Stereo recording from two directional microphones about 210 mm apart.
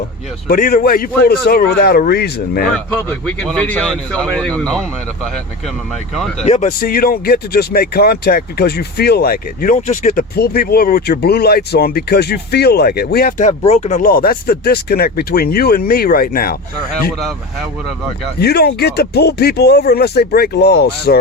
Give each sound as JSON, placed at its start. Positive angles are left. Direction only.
{"t": 0.4, "sound": "speech", "side_deg": 45}
{"t": 3.2, "sound": "speech", "side_deg": 5}
{"t": 6.4, "sound": "speech", "side_deg": 30}
{"t": 13.5, "sound": "speech", "side_deg": 30}
{"t": 18.3, "sound": "speech", "side_deg": 50}